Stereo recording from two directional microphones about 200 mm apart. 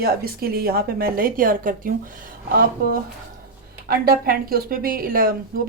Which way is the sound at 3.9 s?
50° right (ahead or behind).